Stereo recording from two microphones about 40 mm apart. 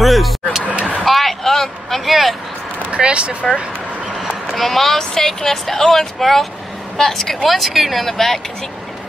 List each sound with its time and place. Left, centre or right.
0.0 s a sound: centre
2.9 s speech: right
4.6 s speech: centre
7.4 s speech: centre